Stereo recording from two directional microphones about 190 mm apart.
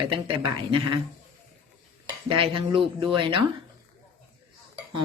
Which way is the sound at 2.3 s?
25° right (ahead or behind).